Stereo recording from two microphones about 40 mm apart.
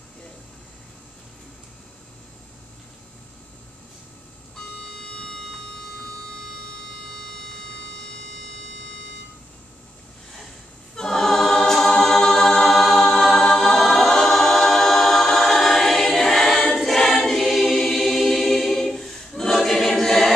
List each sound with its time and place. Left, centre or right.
4.8 s music: left
11.0 s choir: centre